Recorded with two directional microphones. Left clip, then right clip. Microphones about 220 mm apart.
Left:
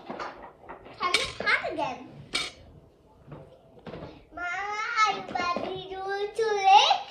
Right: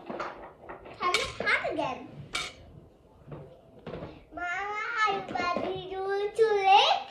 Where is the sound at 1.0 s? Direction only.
5° left (ahead or behind).